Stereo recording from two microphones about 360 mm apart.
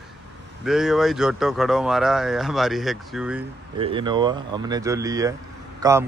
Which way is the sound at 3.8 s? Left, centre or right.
Centre.